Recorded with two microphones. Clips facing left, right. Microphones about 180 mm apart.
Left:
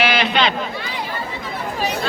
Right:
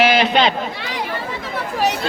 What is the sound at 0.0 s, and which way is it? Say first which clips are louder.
Run: right 3 dB; 40° right (ahead or behind).